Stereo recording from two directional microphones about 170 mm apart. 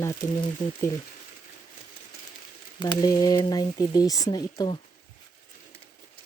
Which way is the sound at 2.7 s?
20° left (ahead or behind).